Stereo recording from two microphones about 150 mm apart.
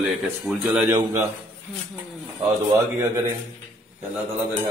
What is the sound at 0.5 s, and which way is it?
Speech, centre (ahead or behind).